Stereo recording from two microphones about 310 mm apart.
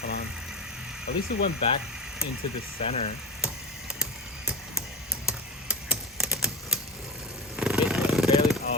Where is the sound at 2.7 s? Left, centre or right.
Centre.